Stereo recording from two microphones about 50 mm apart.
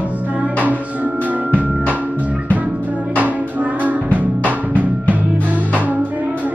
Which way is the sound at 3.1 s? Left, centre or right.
Right.